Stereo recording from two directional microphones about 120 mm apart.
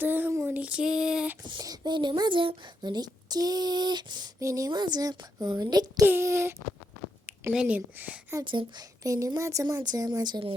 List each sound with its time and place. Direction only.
0.0 s a sound: 15° right (ahead or behind)
1.5 s a child's voice: 35° right (ahead or behind)
4.4 s a child's voice: 25° right (ahead or behind)
6.1 s a woman's voice: 20° right (ahead or behind)
7.5 s a woman's voice: 10° right (ahead or behind)
8.4 s speech: 45° right (ahead or behind)
9.0 s a woman's voice: 25° right (ahead or behind)